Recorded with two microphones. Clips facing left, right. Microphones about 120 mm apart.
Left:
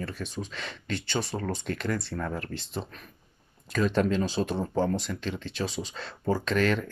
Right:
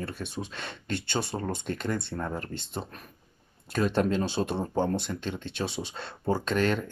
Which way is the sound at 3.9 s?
35° right (ahead or behind).